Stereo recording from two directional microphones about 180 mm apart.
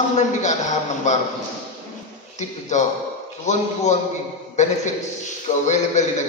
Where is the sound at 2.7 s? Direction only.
40° left (ahead or behind).